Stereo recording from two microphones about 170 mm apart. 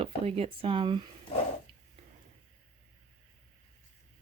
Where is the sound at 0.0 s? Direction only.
35° right (ahead or behind).